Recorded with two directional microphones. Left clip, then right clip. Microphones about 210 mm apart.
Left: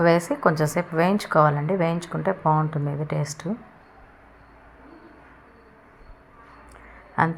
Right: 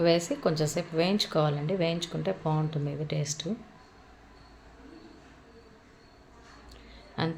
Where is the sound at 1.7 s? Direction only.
40° left (ahead or behind).